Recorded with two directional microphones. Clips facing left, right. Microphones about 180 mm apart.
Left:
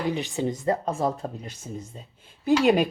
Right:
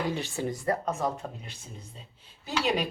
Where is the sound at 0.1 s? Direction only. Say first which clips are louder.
Left 4 dB; 15° left (ahead or behind).